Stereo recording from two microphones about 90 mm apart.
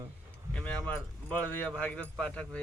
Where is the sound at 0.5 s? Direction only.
15° left (ahead or behind).